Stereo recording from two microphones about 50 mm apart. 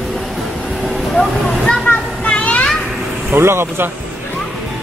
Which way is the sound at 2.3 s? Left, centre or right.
Left.